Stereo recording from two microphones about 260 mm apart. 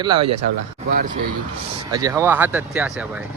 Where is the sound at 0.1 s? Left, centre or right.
Right.